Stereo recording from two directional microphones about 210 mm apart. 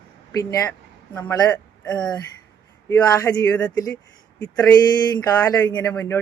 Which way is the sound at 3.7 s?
20° left (ahead or behind).